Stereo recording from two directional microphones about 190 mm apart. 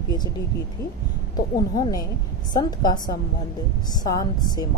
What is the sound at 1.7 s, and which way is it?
Speech, 20° left (ahead or behind).